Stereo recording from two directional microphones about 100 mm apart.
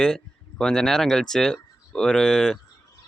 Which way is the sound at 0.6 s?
5° left (ahead or behind).